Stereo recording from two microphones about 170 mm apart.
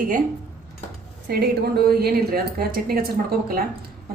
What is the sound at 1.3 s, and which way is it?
Speech, 65° right (ahead or behind).